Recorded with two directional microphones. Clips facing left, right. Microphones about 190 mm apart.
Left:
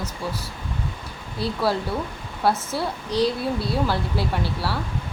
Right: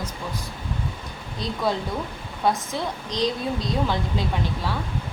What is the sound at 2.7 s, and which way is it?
A woman's voice, 10° left (ahead or behind).